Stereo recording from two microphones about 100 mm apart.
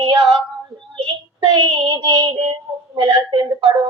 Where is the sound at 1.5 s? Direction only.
45° right (ahead or behind).